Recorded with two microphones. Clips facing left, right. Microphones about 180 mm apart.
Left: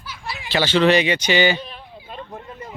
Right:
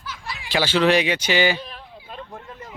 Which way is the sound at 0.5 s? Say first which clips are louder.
Left 2 dB; 10° right (ahead or behind).